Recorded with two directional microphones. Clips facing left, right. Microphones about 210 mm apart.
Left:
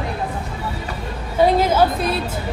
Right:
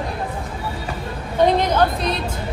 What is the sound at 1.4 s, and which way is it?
A woman's voice, 5° left (ahead or behind).